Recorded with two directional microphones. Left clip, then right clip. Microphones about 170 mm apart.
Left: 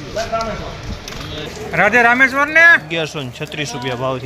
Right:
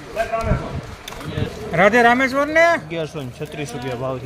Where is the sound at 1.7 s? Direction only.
90° right; by 2.8 s 65° right (ahead or behind).